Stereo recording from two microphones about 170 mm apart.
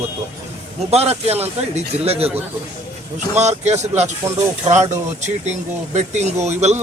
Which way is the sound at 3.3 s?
40° right (ahead or behind).